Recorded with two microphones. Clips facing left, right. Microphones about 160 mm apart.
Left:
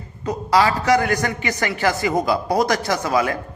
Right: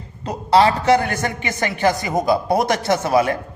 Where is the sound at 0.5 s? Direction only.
30° right (ahead or behind).